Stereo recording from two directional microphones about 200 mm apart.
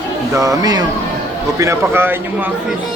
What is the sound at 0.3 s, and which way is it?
Speech, 15° right (ahead or behind).